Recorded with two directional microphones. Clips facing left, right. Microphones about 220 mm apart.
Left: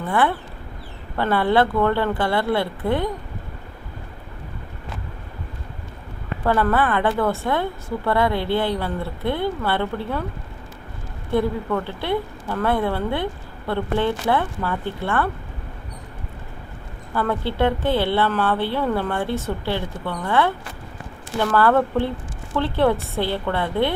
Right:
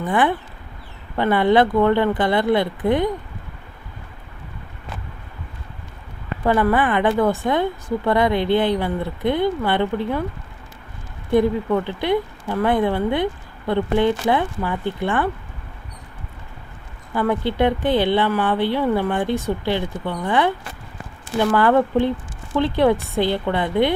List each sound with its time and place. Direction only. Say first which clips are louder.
0.0 s a woman's voice: right 2 dB; 15° right (ahead or behind)
6.4 s a woman's voice: right 2 dB; 15° right (ahead or behind)
11.3 s a woman's voice: right 4 dB; 15° right (ahead or behind)
17.2 s a woman's voice: right 2 dB; 15° right (ahead or behind)